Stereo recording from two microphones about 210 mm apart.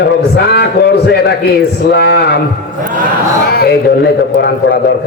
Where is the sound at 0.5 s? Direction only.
50° left (ahead or behind).